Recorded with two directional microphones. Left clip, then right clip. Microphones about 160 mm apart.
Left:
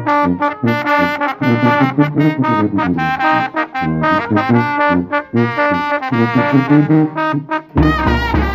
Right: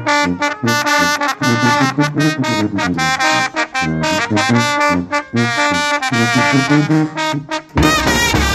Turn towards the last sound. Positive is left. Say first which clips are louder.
# left 1 dB
turn(degrees=-25)  # may be behind; listen again after turning